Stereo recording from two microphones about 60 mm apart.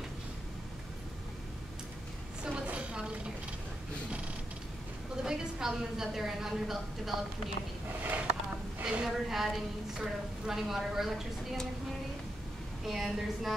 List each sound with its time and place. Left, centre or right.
2.6 s chopping: right
5.1 s a woman's voice: centre
8.0 s a sound: right
8.8 s a woman's voice: centre
12.8 s a woman's voice: centre